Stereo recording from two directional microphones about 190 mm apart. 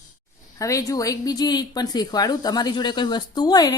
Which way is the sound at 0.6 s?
15° left (ahead or behind).